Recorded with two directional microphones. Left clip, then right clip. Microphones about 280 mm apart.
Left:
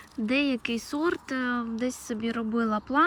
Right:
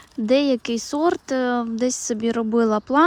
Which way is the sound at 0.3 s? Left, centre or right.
Centre.